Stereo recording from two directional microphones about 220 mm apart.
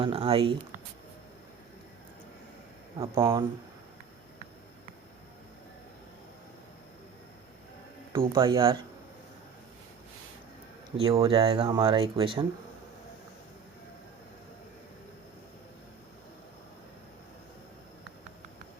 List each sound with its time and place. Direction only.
0.0 s speech: 25° right (ahead or behind)
3.0 s speech: 15° right (ahead or behind)
8.3 s speech: 20° right (ahead or behind)
10.9 s speech: 25° right (ahead or behind)